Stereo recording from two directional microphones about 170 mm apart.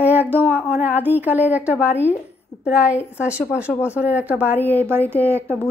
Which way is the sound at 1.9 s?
15° left (ahead or behind).